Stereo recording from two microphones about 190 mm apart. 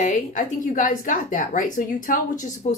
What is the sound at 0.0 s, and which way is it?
A woman's voice, 40° left (ahead or behind).